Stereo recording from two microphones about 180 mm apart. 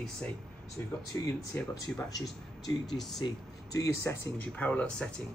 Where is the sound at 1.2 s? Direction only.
15° left (ahead or behind).